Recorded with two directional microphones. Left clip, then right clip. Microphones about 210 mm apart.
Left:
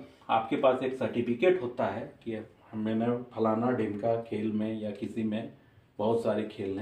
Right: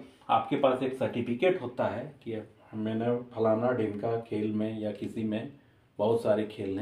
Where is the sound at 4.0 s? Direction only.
25° right (ahead or behind).